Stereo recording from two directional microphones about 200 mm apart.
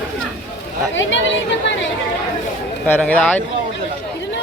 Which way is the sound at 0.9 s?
65° left (ahead or behind).